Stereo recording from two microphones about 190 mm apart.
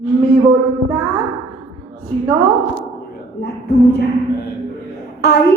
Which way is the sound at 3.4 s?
60° left (ahead or behind).